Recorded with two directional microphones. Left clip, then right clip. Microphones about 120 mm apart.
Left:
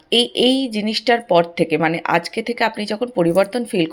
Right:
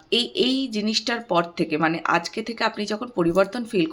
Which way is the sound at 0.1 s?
30° left (ahead or behind).